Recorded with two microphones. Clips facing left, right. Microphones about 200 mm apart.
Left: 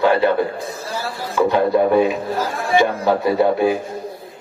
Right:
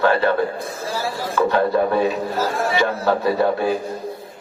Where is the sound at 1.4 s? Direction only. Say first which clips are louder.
Left 2 dB; 15° left (ahead or behind).